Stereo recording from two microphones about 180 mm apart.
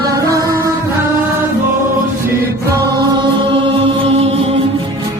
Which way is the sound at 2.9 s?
25° right (ahead or behind).